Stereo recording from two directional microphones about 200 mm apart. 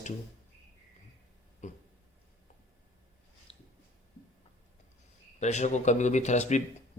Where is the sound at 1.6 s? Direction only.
35° left (ahead or behind).